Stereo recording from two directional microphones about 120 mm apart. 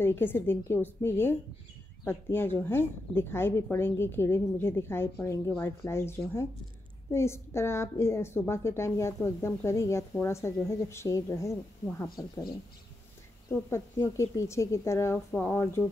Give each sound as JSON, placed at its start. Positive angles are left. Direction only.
{"t": 0.0, "sound": "a woman's voice", "side_deg": 20}
{"t": 13.5, "sound": "a woman's voice", "side_deg": 20}